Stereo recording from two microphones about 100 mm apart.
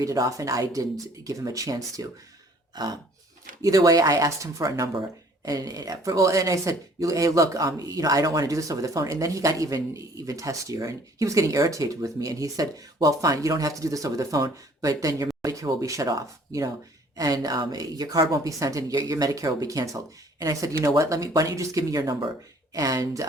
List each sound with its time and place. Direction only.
0.0 s speech: 35° right (ahead or behind)
2.7 s throat clearing: 40° right (ahead or behind)
3.6 s speech: 35° right (ahead or behind)